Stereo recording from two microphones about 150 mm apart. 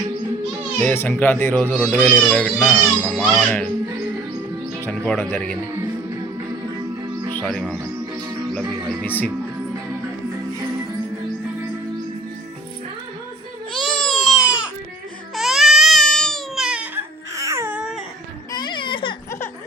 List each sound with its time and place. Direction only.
0.8 s speech: 10° left (ahead or behind)
2.1 s a child's voice: 10° left (ahead or behind)
4.9 s speech: 5° left (ahead or behind)
7.0 s music: 25° right (ahead or behind)
9.0 s speech: 10° left (ahead or behind)
13.7 s baby cry: centre (ahead or behind)
17.3 s baby cry: 20° right (ahead or behind)
17.7 s dog: 5° right (ahead or behind)
18.5 s baby cry: 30° left (ahead or behind)